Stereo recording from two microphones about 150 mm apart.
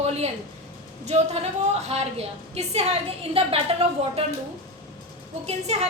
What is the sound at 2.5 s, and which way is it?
A woman's voice, 40° right (ahead or behind).